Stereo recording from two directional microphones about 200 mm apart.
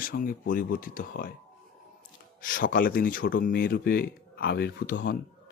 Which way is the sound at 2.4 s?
45° left (ahead or behind).